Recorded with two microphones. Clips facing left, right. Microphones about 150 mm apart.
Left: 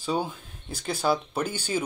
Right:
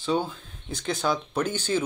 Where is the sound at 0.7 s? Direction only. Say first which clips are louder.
Left 1 dB; 5° left (ahead or behind).